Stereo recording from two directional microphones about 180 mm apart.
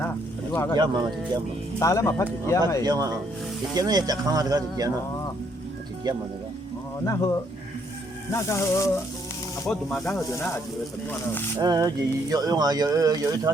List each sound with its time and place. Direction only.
0.5 s speech: 15° left (ahead or behind)
1.8 s speech: 15° left (ahead or behind)
2.8 s speech: 20° right (ahead or behind)
7.0 s speech: 20° left (ahead or behind)
9.6 s speech: centre (ahead or behind)
10.3 s speech: 15° left (ahead or behind)
11.6 s speech: 20° right (ahead or behind)